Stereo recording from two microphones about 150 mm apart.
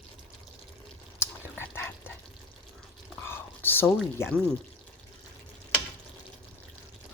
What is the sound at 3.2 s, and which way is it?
Whispering, 15° left (ahead or behind).